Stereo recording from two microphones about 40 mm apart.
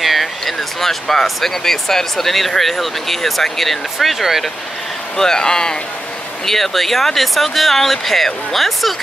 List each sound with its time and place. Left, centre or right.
0.0 s speech: centre
5.1 s speech: centre
6.4 s speech: centre